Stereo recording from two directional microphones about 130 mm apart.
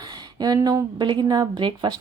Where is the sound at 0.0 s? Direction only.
30° right (ahead or behind).